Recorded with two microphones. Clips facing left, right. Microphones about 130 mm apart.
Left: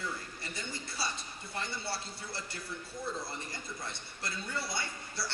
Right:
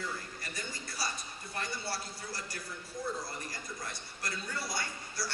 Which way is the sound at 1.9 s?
25° left (ahead or behind).